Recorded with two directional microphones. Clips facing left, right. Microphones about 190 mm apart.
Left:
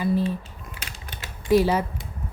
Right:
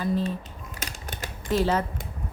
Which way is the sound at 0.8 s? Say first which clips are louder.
Right 6 dB; 40° right (ahead or behind).